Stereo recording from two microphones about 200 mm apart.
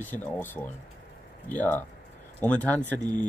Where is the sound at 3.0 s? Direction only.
20° right (ahead or behind).